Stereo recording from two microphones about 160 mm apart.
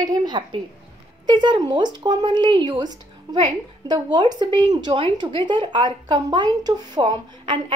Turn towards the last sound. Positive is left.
turn(degrees=-30)  # may be behind; listen again after turning